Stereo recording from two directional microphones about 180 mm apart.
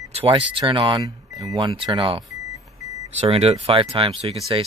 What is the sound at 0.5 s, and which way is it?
Speech, 25° right (ahead or behind).